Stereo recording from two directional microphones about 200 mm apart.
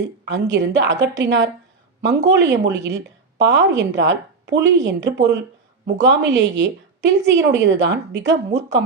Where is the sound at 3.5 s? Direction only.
60° right (ahead or behind).